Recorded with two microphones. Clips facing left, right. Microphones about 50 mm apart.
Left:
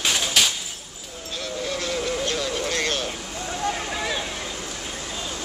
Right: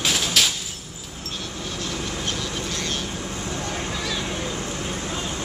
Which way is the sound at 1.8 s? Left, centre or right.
Left.